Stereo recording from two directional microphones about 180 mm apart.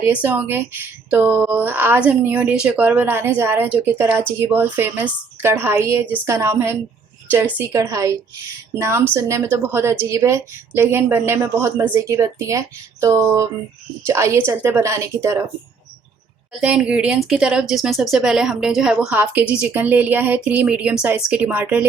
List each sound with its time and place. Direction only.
0.0 s speech: 10° right (ahead or behind)
16.5 s speech: 5° right (ahead or behind)